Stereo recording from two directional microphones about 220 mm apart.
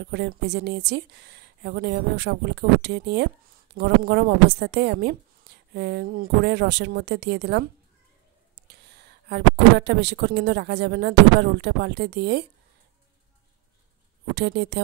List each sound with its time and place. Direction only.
0.1 s speech: 50° right (ahead or behind)
8.6 s speech: 50° right (ahead or behind)
14.3 s speech: 50° right (ahead or behind)